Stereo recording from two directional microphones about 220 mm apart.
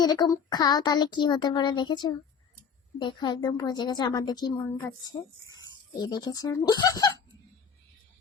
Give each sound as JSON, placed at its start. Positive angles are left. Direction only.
{"t": 0.0, "sound": "a woman's voice", "side_deg": 15}